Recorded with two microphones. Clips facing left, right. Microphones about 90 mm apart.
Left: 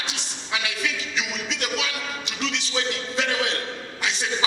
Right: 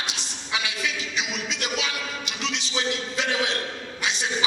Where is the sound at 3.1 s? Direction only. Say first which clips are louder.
Left 2 dB; 20° right (ahead or behind).